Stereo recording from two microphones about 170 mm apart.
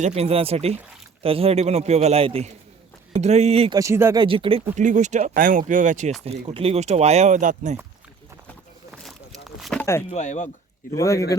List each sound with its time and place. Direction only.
0.0 s speech: 40° right (ahead or behind)
3.8 s speech: 15° right (ahead or behind)
4.2 s speech: 30° right (ahead or behind)
4.8 s speech: 45° right (ahead or behind)
6.2 s speech: 35° right (ahead or behind)
8.9 s a sound: centre (ahead or behind)
10.1 s speech: 45° left (ahead or behind)
10.9 s speech: 20° left (ahead or behind)